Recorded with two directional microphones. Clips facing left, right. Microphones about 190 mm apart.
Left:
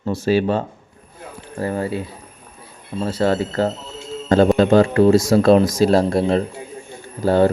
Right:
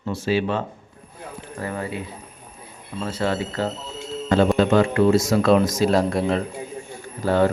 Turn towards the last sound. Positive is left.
turn(degrees=30)  # may be behind; listen again after turning